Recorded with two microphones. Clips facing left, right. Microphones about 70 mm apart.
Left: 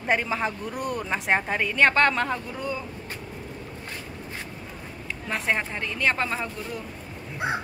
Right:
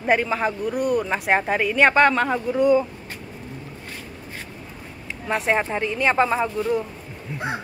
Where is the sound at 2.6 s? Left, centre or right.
Right.